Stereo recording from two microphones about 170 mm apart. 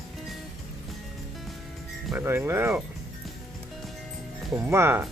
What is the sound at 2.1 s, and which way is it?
Speech, 15° right (ahead or behind).